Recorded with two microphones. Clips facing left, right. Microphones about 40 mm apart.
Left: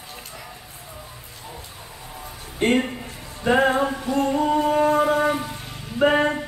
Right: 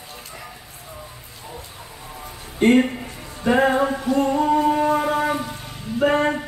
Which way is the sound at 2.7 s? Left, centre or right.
Centre.